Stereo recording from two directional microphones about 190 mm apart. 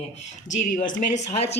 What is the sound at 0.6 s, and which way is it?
Speech, 45° left (ahead or behind).